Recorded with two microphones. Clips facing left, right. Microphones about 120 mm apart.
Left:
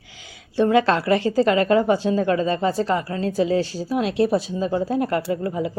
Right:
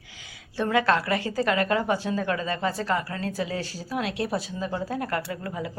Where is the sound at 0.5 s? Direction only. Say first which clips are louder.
Left 5 dB; 25° left (ahead or behind).